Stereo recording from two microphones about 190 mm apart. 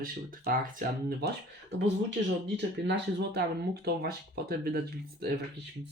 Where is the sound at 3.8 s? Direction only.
55° right (ahead or behind).